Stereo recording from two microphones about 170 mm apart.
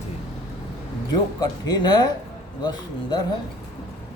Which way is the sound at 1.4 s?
25° left (ahead or behind).